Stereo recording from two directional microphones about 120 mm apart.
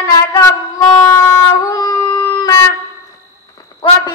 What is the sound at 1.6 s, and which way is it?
Dog, 30° left (ahead or behind).